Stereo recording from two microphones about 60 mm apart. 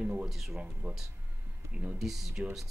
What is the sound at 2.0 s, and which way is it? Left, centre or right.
Speech, centre.